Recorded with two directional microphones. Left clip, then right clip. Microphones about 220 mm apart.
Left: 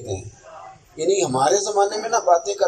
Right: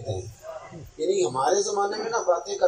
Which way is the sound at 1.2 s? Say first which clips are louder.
Left 3 dB; 45° left (ahead or behind).